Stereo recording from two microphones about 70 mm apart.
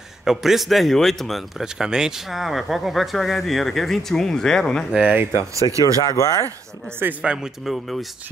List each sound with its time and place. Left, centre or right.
0.2 s speech: centre
1.6 s speech: centre
5.3 s speech: right
6.0 s speech: left
7.0 s speech: right
7.6 s speech: centre